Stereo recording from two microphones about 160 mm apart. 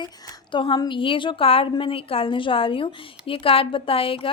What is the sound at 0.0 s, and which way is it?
A woman's voice, 30° left (ahead or behind).